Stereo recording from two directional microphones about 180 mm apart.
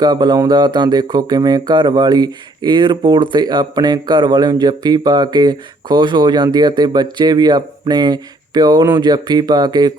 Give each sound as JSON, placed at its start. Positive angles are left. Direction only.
{"t": 0.0, "sound": "speech", "side_deg": -25}